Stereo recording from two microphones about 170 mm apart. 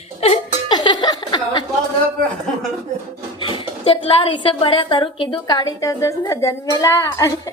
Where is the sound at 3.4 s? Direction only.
30° left (ahead or behind).